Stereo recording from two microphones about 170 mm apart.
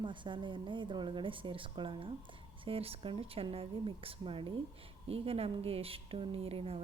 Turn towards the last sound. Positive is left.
turn(degrees=-35)  # may be behind; listen again after turning